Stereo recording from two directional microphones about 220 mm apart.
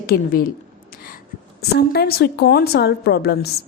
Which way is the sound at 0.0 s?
40° left (ahead or behind).